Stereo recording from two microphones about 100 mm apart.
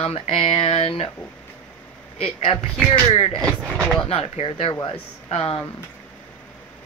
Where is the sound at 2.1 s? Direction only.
90° left; by 3.3 s 75° left (ahead or behind).